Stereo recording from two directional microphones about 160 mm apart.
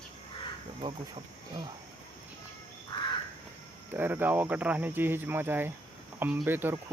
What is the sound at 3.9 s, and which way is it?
Speech, 10° right (ahead or behind).